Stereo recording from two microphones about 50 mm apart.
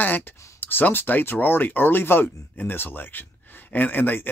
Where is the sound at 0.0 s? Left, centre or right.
Left.